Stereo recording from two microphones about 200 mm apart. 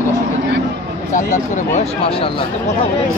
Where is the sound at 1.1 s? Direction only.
40° left (ahead or behind).